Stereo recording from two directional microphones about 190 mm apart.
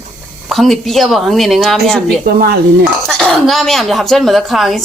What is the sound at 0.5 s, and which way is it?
Speech, centre (ahead or behind).